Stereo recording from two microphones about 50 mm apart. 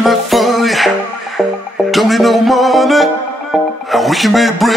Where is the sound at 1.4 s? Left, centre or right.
Centre.